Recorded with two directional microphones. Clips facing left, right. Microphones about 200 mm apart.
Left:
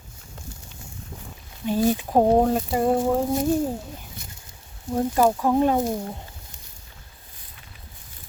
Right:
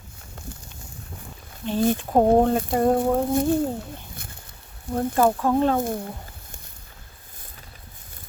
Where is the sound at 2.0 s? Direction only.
5° left (ahead or behind).